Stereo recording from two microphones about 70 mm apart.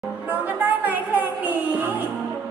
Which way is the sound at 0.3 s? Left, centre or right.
Right.